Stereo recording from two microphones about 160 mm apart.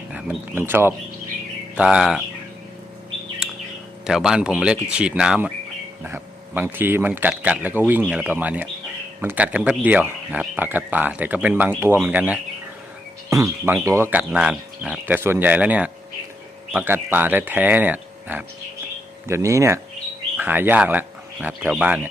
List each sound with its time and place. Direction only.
0.1 s a sound: 5° right (ahead or behind)
0.6 s speech: 15° right (ahead or behind)
4.0 s speech: 5° right (ahead or behind)